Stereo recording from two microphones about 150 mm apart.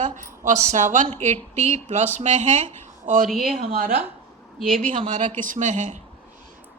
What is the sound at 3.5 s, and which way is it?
Speech, 80° right.